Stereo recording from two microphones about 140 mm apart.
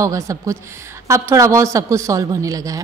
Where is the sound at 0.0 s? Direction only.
25° right (ahead or behind).